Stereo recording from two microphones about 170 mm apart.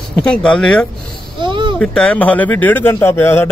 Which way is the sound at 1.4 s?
30° right (ahead or behind).